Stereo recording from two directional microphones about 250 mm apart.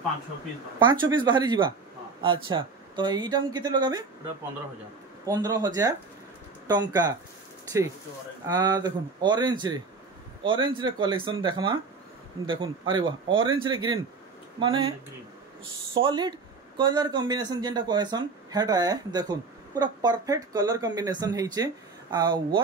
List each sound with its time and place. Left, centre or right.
0.7 s a man's voice: centre
5.2 s speech: centre
8.5 s a man's voice: centre